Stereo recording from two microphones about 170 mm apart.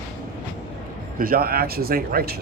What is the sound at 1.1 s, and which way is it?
A man's voice, 60° right (ahead or behind).